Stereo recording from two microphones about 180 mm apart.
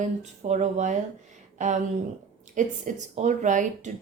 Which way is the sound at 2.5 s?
40° right (ahead or behind).